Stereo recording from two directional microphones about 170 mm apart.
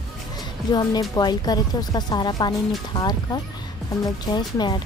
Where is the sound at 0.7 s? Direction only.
25° left (ahead or behind).